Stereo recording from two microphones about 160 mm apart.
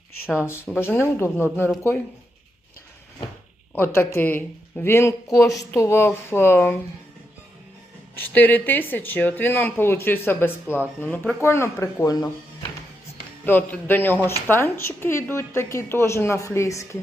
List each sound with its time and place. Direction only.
0.3 s speech: 15° left (ahead or behind)
3.8 s speech: 15° left (ahead or behind)
8.1 s speech: 10° left (ahead or behind)
13.4 s speech: 10° left (ahead or behind)